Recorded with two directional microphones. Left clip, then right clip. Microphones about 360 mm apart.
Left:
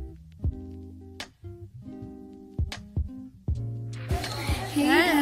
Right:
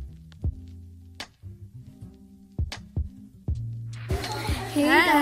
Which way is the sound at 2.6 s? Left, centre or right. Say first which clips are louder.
Right 1 dB; centre.